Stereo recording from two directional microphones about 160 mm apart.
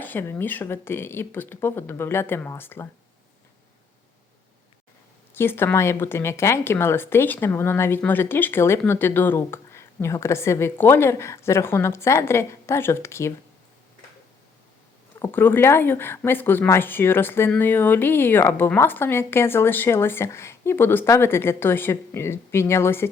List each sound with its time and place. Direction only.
0.0 s speech: 15° left (ahead or behind)
5.3 s speech: 15° left (ahead or behind)
15.2 s speech: 15° left (ahead or behind)